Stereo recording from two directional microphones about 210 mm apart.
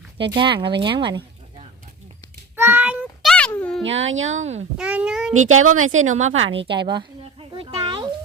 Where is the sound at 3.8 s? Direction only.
65° right (ahead or behind).